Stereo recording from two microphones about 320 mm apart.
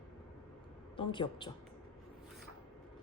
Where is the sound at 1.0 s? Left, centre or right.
Centre.